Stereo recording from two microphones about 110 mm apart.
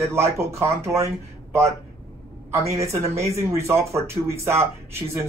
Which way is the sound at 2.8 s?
25° right (ahead or behind).